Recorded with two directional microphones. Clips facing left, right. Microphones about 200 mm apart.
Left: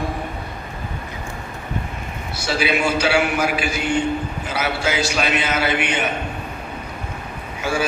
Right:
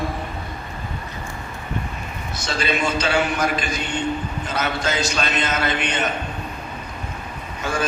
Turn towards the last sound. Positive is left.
turn(degrees=10)  # may be behind; listen again after turning